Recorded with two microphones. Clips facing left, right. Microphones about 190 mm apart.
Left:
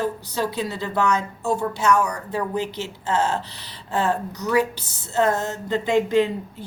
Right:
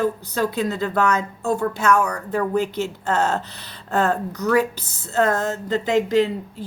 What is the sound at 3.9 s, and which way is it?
Speech, 50° right (ahead or behind).